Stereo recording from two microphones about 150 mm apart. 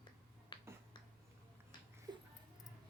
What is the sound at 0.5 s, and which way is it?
Finger snapping, 35° left (ahead or behind).